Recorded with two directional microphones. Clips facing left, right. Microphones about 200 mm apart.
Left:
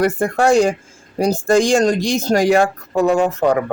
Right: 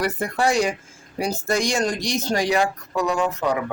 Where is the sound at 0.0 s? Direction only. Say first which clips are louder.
Left 6 dB; 50° left (ahead or behind).